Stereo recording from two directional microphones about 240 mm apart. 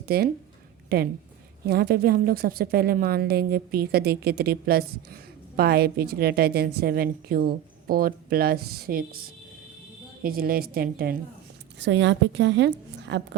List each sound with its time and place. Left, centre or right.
0.0 s speech: right
1.6 s a woman's voice: right